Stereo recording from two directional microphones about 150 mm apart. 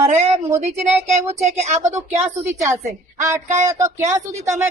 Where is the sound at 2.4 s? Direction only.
20° right (ahead or behind).